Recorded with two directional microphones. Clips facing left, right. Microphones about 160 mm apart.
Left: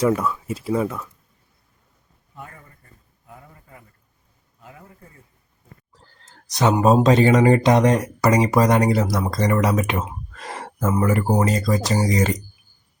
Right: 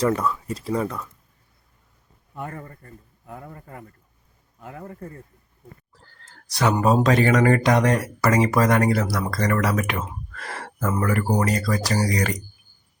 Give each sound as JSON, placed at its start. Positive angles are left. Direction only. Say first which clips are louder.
{"t": 0.0, "sound": "speech", "louder": "left 2 dB", "side_deg": 5}
{"t": 2.3, "sound": "a man's voice", "louder": "right 7 dB", "side_deg": -60}
{"t": 6.2, "sound": "speech", "louder": "left 3 dB", "side_deg": 20}